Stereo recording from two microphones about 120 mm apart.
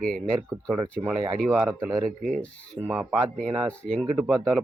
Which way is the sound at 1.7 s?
25° right (ahead or behind).